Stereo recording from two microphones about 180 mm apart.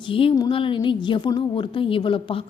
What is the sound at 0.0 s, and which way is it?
A woman's voice, 30° left (ahead or behind).